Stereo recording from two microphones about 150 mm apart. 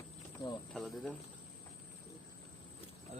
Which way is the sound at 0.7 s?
Centre (ahead or behind).